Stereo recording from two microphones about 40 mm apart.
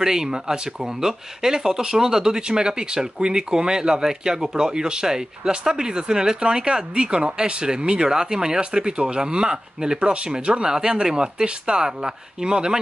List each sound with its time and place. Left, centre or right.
0.0 s speech: centre